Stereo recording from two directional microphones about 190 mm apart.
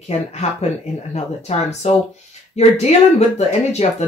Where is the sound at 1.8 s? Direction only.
35° left (ahead or behind).